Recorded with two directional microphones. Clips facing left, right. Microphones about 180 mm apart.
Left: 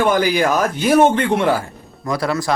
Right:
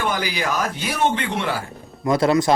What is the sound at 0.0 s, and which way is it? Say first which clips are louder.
Speech: left 8 dB; 50° left (ahead or behind).